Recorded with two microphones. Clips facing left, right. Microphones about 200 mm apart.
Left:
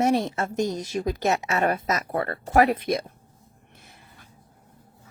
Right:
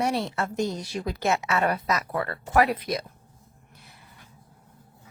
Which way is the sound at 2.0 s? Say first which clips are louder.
Left 2 dB; 30° left (ahead or behind).